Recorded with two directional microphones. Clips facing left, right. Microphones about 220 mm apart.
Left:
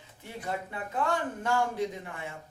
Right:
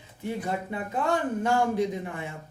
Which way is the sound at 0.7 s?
20° right (ahead or behind).